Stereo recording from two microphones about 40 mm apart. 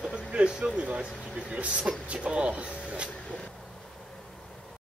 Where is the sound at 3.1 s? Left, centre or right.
Left.